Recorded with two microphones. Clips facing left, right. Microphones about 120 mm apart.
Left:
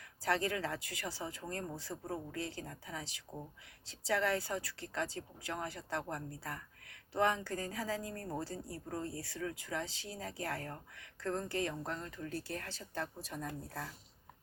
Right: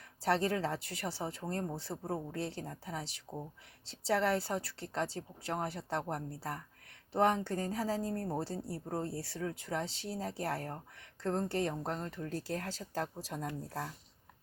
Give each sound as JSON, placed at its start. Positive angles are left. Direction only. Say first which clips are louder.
{"t": 0.3, "sound": "speech", "louder": "right 3 dB", "side_deg": -30}